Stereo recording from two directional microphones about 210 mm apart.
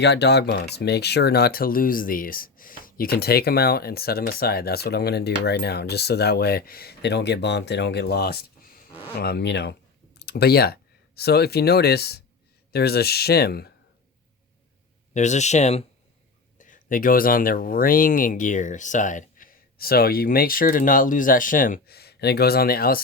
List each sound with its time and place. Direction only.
0.0 s speech: 55° left (ahead or behind)
15.1 s speech: 35° left (ahead or behind)